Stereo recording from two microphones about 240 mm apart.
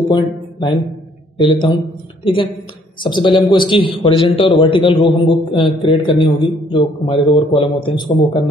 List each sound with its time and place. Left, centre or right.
0.1 s a man's voice: centre